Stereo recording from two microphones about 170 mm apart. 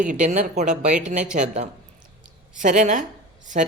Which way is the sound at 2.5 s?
45° right (ahead or behind).